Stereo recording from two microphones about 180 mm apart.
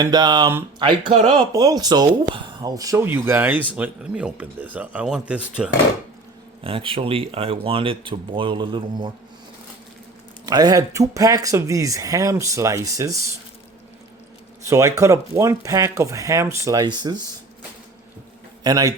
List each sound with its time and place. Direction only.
0.0 s speech: 20° right (ahead or behind); by 5.7 s 5° right (ahead or behind)
6.7 s speech: 30° right (ahead or behind)
10.4 s speech: 20° right (ahead or behind)
14.6 s speech: 15° right (ahead or behind)
18.6 s speech: 20° right (ahead or behind)